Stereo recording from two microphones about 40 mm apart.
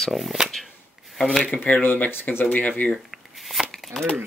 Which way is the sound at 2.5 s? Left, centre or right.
Left.